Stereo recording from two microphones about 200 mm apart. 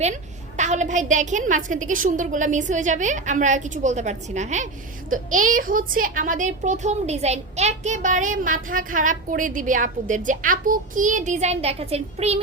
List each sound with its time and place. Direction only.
0.5 s a woman's voice: 35° right (ahead or behind)